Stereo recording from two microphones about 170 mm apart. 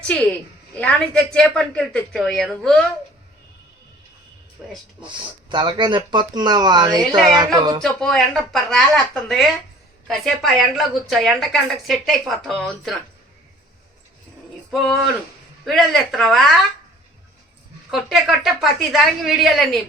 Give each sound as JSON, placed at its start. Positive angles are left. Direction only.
{"t": 0.1, "sound": "a woman's voice", "side_deg": 10}
{"t": 5.0, "sound": "speech", "side_deg": -30}
{"t": 7.8, "sound": "a woman's voice", "side_deg": 5}
{"t": 14.7, "sound": "a woman's voice", "side_deg": 0}
{"t": 17.9, "sound": "a woman's voice", "side_deg": 0}